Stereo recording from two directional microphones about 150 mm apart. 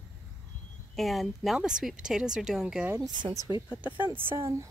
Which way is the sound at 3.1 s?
30° right (ahead or behind).